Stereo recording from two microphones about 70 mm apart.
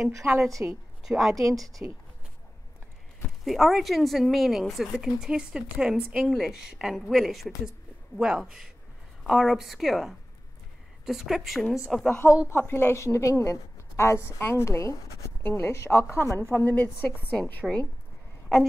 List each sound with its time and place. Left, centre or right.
0.6 s a woman's voice: right
1.0 s speech: centre
3.4 s speech: centre
5.0 s speech: centre
6.2 s speech: centre
8.2 s speech: centre
12.4 s a woman's voice: left
17.6 s speech: centre